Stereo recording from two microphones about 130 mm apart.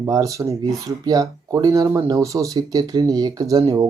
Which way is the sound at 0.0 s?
25° right (ahead or behind).